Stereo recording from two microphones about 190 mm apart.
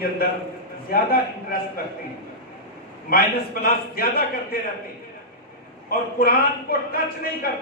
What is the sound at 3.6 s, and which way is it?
Speech, 50° left (ahead or behind).